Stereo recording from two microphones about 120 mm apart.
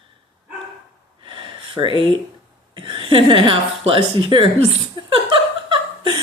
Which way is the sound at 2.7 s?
45° right (ahead or behind).